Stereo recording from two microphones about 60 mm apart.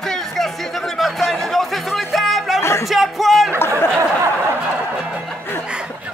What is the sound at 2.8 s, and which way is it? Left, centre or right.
Music, centre.